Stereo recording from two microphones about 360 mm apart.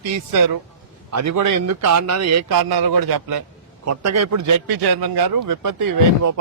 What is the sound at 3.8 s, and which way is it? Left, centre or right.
A man's voice, right.